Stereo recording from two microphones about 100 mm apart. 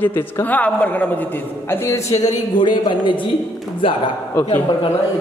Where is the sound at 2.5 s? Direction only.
50° left (ahead or behind).